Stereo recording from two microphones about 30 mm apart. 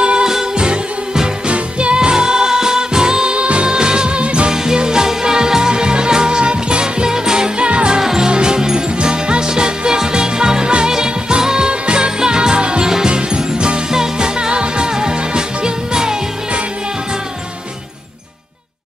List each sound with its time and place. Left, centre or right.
0.0 s music: right
1.5 s music: right
2.0 s music: right
3.3 s music: right
3.7 s music: right
4.5 s music: right
8.0 s music: centre
8.3 s music: right